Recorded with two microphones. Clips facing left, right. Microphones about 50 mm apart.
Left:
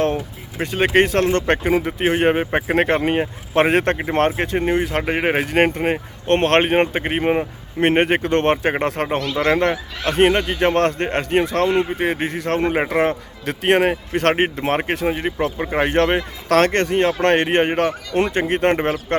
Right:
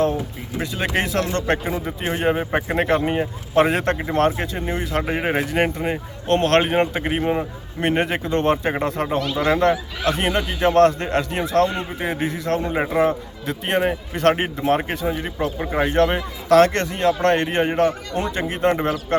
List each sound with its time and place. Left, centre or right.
0.6 s speech: left
5.5 s speech: left